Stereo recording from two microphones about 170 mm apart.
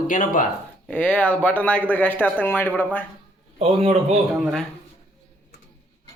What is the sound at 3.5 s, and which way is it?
Speech, 35° right (ahead or behind).